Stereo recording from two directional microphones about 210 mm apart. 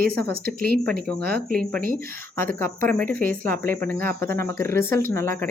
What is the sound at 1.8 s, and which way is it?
Speech, 45° right (ahead or behind).